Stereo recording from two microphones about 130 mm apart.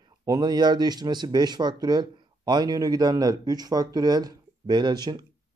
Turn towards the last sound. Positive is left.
turn(degrees=-35)  # may be behind; listen again after turning